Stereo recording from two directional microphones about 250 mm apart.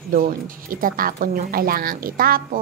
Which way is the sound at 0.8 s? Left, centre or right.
Right.